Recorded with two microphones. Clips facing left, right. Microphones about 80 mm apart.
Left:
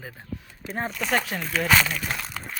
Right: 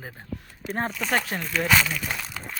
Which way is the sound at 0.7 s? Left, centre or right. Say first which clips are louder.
Right 2 dB; right.